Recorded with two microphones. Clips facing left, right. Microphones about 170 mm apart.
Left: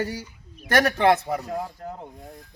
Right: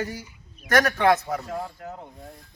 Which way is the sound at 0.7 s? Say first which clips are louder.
Left 1 dB; 30° left (ahead or behind).